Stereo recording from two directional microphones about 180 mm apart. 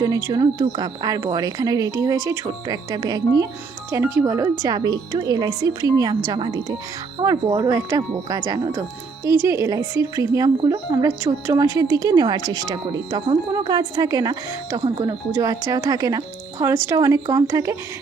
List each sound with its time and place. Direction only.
0.3 s a woman's voice: 20° right (ahead or behind)